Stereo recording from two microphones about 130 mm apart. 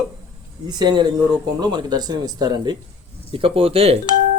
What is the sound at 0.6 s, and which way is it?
Speech, 35° right (ahead or behind).